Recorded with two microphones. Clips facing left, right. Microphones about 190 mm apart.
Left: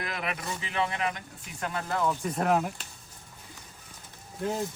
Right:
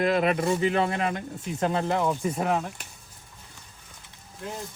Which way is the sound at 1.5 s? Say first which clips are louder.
Right 6 dB; 25° right (ahead or behind).